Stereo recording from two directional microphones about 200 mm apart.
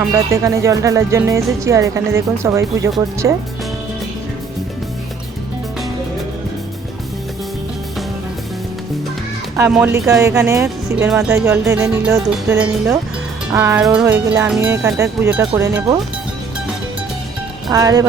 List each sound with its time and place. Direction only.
0.1 s speech: 15° right (ahead or behind)
9.6 s speech: 10° right (ahead or behind)
17.7 s speech: 20° right (ahead or behind)